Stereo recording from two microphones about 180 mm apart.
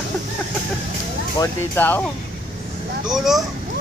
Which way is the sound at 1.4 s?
10° left (ahead or behind).